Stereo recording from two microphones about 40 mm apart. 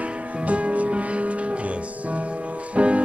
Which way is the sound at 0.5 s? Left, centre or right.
Right.